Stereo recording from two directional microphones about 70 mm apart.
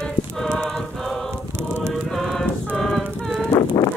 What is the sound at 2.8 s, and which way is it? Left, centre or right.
A capella, centre.